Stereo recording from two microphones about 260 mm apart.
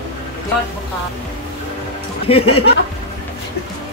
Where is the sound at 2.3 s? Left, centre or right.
Left.